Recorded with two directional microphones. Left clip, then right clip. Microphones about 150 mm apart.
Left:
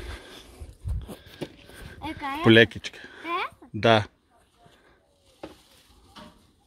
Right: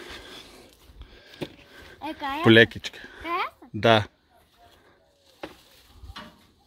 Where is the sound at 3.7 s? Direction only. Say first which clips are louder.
Right 1 dB; 5° left (ahead or behind).